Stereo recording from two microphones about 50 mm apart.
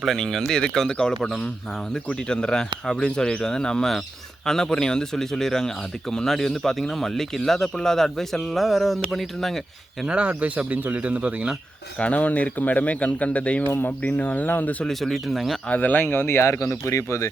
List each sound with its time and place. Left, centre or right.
0.0 s speech: centre
10.1 s speech: right
11.9 s speech: left
14.8 s speech: centre
15.7 s speech: left